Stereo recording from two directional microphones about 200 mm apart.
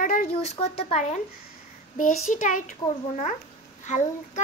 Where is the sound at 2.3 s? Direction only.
40° left (ahead or behind).